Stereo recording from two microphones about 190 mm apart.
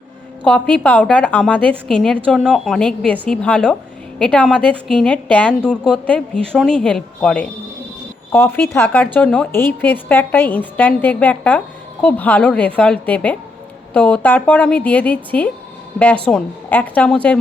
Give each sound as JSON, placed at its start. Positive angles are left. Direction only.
{"t": 0.7, "sound": "a woman's voice", "side_deg": 10}